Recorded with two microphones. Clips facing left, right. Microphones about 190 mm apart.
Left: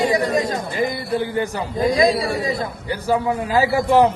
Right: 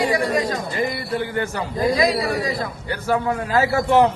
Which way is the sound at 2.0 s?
25° left (ahead or behind).